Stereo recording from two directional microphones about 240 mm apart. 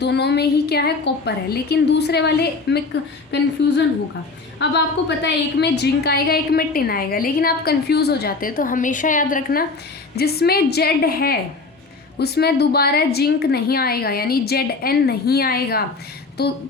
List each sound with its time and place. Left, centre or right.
0.0 s a woman's voice: left